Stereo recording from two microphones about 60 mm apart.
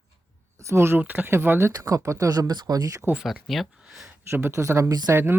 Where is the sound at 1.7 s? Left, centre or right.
Right.